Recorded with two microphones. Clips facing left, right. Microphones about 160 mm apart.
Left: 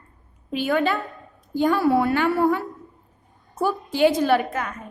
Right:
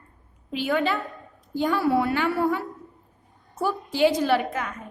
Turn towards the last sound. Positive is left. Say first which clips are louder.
# left 3 dB
turn(degrees=50)  # may be behind; listen again after turning